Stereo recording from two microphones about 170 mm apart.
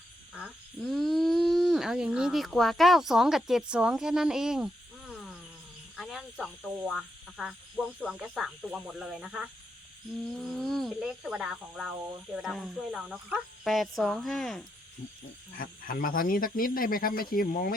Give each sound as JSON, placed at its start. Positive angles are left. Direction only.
{"t": 0.3, "sound": "speech", "side_deg": 0}
{"t": 15.5, "sound": "speech", "side_deg": 55}